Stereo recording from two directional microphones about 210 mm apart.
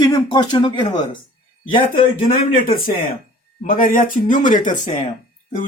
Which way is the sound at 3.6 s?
40° left (ahead or behind).